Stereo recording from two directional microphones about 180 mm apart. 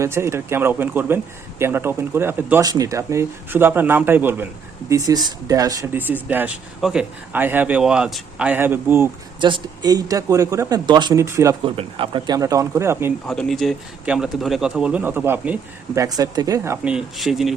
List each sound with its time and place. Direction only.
0.0 s speech: 15° right (ahead or behind)
9.4 s speech: 25° right (ahead or behind)
11.6 s speech: 30° right (ahead or behind); by 13.1 s 15° right (ahead or behind)
13.2 s speech: 5° left (ahead or behind); by 16.7 s 20° right (ahead or behind)
16.8 s speech: 5° right (ahead or behind)